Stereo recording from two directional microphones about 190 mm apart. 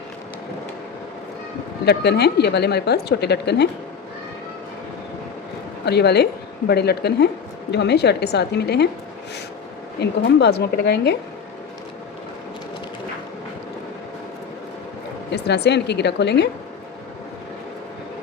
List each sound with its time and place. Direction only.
1.8 s a woman's voice: 60° left (ahead or behind)
5.8 s a woman's voice: 60° left (ahead or behind)
10.0 s a woman's voice: 60° left (ahead or behind)
15.3 s a woman's voice: 60° left (ahead or behind)